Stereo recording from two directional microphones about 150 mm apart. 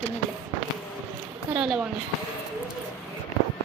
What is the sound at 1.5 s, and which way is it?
Speech, centre (ahead or behind).